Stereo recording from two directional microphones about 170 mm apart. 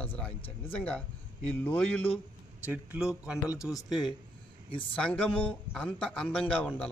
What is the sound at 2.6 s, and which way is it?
Speech, 10° right (ahead or behind).